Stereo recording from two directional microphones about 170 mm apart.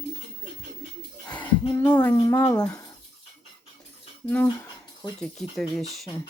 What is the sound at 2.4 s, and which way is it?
Speech, 5° left (ahead or behind).